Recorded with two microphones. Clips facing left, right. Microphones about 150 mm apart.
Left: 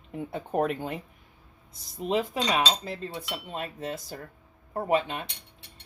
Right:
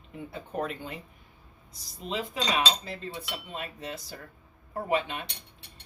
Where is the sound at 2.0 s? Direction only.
50° left (ahead or behind).